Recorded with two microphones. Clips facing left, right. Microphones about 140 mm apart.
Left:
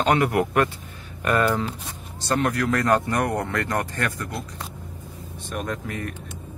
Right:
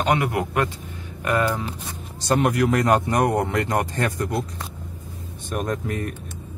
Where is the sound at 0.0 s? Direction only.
15° right (ahead or behind).